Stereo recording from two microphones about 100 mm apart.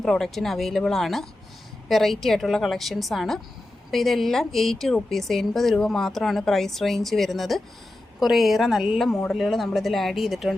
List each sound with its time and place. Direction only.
0.0 s a woman's voice: 5° left (ahead or behind)